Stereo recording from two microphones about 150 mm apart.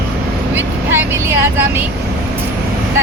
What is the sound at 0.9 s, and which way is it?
Vehicle, 15° right (ahead or behind).